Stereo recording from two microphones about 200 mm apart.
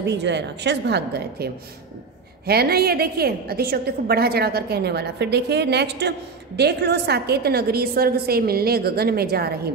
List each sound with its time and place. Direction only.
0.0 s a woman's voice: 60° right (ahead or behind)